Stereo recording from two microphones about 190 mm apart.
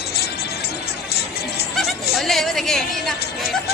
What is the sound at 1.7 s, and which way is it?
Music, centre (ahead or behind).